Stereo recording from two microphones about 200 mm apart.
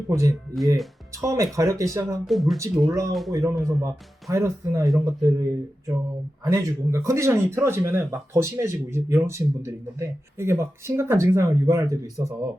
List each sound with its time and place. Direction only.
0.1 s speech: 15° right (ahead or behind)
2.2 s speech: centre (ahead or behind)
2.8 s speech: 15° right (ahead or behind)
3.1 s speech: centre (ahead or behind)
3.6 s speech: 15° right (ahead or behind)